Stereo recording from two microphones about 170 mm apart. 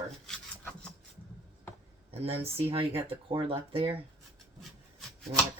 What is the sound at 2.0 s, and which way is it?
Speech, 35° right (ahead or behind).